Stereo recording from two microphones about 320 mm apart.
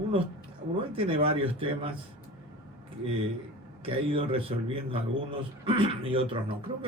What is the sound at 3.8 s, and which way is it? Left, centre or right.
Speech, centre.